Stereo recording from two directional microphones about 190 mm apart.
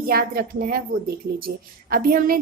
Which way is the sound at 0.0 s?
50° right (ahead or behind).